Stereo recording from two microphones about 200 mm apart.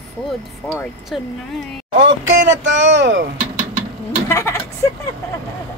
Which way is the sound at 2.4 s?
65° right (ahead or behind).